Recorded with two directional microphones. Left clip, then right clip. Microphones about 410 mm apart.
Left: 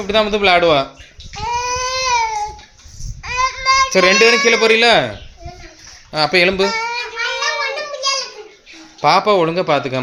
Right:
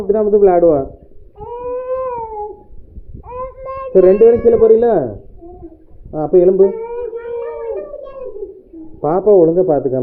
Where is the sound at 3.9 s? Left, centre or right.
Left.